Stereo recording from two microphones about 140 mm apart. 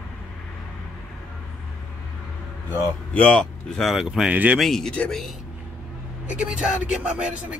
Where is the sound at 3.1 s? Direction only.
10° left (ahead or behind); by 4.6 s 10° right (ahead or behind).